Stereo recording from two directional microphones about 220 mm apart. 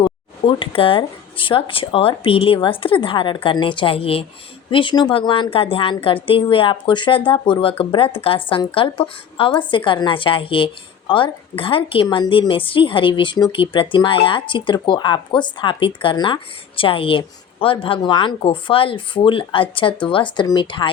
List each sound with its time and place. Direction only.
0.0 s a woman's voice: 25° left (ahead or behind)